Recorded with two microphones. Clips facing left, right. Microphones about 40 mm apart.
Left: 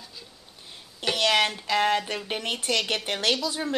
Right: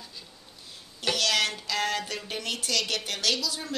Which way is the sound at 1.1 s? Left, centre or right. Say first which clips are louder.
Left 4 dB; left.